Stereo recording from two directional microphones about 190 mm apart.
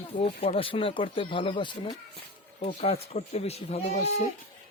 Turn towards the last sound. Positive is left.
turn(degrees=35)  # may be behind; listen again after turning